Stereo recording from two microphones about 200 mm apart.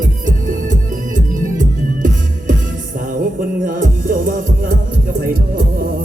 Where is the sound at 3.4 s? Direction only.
40° right (ahead or behind).